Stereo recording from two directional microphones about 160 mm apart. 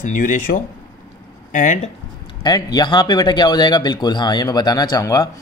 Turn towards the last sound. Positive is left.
turn(degrees=25)  # may be behind; listen again after turning